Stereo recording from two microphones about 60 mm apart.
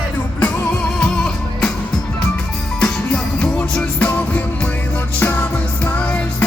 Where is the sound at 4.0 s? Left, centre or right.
Left.